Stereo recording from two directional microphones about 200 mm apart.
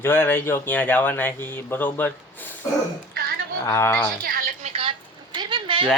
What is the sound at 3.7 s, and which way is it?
Speech, 10° left (ahead or behind).